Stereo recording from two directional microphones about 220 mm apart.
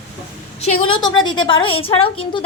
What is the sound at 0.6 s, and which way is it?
A woman's voice, 25° left (ahead or behind).